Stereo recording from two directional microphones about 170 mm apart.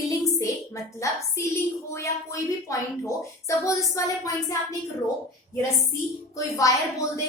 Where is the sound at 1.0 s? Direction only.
20° left (ahead or behind).